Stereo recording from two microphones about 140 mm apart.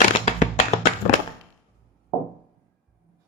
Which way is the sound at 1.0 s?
70° left (ahead or behind).